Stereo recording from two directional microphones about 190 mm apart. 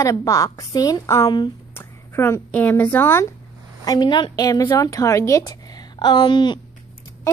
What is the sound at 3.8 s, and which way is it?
A woman's voice, 20° left (ahead or behind).